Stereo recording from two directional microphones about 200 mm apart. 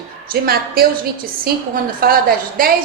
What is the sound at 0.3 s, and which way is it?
A woman's voice, 50° right (ahead or behind).